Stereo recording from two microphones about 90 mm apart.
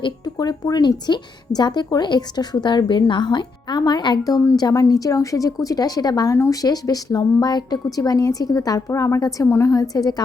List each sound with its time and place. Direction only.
0.3 s speech: 50° left (ahead or behind)
6.3 s a woman's voice: 35° left (ahead or behind)